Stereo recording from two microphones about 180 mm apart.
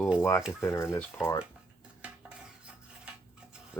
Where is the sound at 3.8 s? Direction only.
10° left (ahead or behind).